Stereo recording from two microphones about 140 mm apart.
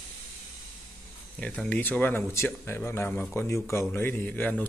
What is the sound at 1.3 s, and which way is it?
A man's voice, 10° left (ahead or behind).